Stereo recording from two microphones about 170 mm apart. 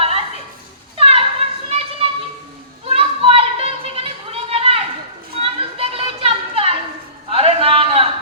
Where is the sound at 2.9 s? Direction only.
35° right (ahead or behind).